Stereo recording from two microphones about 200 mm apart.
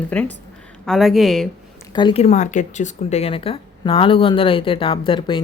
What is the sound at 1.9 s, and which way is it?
Speech, 25° left (ahead or behind).